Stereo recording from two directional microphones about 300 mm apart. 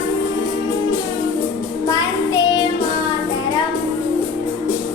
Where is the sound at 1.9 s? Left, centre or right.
Centre.